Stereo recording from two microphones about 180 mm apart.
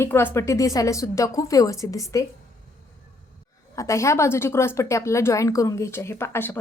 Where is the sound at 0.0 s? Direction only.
15° left (ahead or behind).